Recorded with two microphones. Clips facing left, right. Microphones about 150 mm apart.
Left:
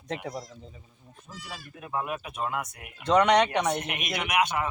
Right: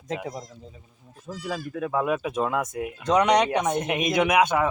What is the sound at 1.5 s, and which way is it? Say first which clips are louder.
Speech: right 11 dB; 90° right.